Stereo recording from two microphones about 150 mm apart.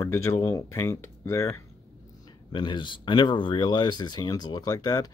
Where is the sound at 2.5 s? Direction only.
30° left (ahead or behind).